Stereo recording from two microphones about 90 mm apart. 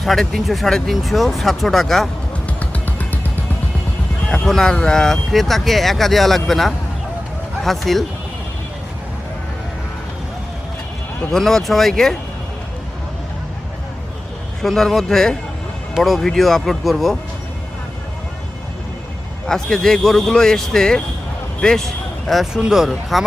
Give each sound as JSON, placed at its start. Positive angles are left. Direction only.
{"t": 0.0, "sound": "speech", "side_deg": 0}
{"t": 2.6, "sound": "music", "side_deg": 15}
{"t": 4.3, "sound": "speech", "side_deg": 5}
{"t": 11.3, "sound": "speech", "side_deg": 5}
{"t": 14.6, "sound": "speech", "side_deg": 5}
{"t": 19.5, "sound": "speech", "side_deg": 5}